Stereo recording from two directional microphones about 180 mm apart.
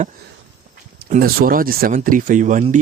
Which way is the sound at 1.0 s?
50° right (ahead or behind).